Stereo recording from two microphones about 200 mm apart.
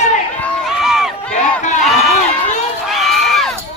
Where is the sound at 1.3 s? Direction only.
35° left (ahead or behind).